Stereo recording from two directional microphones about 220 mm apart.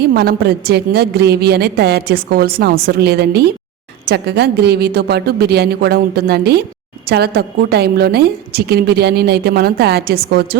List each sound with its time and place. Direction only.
0.0 s a woman's voice: 45° right (ahead or behind)